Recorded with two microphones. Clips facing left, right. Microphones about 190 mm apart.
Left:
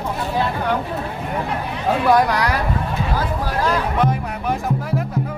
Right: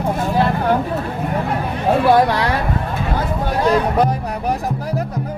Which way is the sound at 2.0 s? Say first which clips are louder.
Right 1 dB; 30° right (ahead or behind).